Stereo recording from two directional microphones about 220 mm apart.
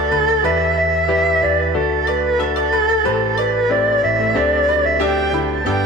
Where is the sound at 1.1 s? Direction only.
Centre (ahead or behind).